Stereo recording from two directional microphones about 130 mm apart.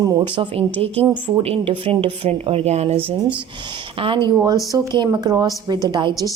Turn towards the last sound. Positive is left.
turn(degrees=-35)  # may be behind; listen again after turning